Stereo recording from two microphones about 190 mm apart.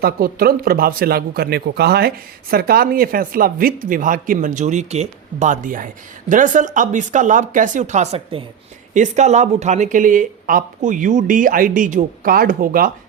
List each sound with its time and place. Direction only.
0.0 s a man's voice: 50° right (ahead or behind)